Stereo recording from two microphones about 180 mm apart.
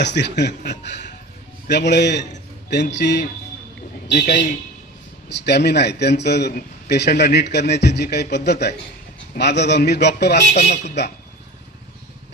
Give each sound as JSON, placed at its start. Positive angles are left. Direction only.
{"t": 0.0, "sound": "a man's voice", "side_deg": 70}